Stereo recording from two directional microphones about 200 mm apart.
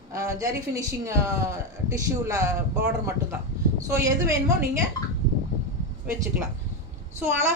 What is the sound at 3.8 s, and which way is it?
Speech, 15° right (ahead or behind).